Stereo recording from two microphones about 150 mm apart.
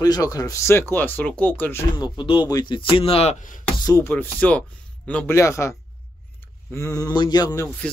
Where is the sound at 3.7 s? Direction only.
25° left (ahead or behind).